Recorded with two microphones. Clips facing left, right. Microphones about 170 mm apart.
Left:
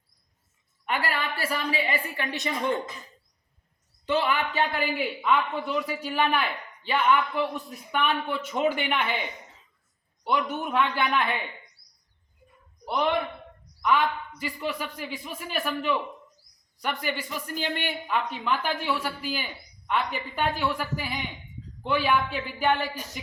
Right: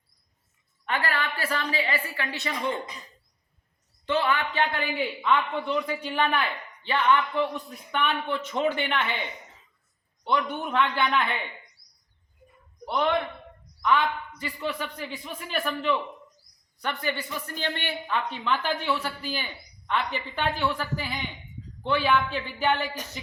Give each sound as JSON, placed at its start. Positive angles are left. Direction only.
{"t": 0.9, "sound": "a man's voice", "side_deg": 10}
{"t": 4.0, "sound": "a man's voice", "side_deg": 10}
{"t": 10.2, "sound": "a man's voice", "side_deg": 10}
{"t": 12.8, "sound": "a man's voice", "side_deg": 10}